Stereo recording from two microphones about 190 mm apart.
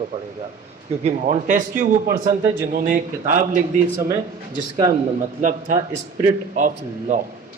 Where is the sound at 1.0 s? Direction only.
35° right (ahead or behind).